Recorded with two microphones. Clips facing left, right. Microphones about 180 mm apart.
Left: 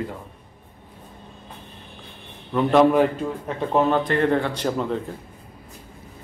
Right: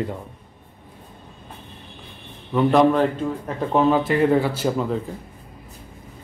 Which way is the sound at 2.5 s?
Centre (ahead or behind).